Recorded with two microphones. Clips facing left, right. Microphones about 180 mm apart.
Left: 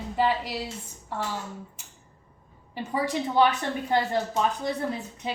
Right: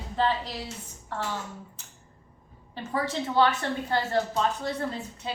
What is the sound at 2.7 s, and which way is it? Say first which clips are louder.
A woman's voice: left 2 dB; 15° left (ahead or behind).